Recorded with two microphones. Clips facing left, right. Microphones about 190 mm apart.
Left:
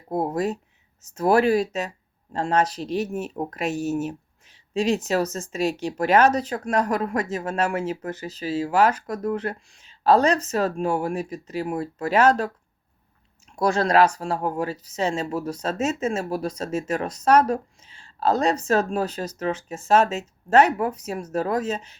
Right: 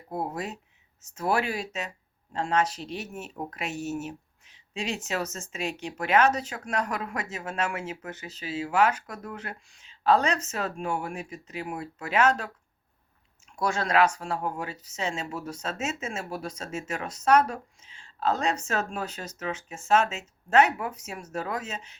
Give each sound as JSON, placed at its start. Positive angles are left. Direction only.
{"t": 0.1, "sound": "speech", "side_deg": 40}
{"t": 13.6, "sound": "speech", "side_deg": 35}